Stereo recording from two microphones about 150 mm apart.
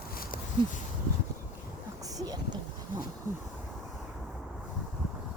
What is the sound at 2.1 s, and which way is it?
Boat, 25° right (ahead or behind).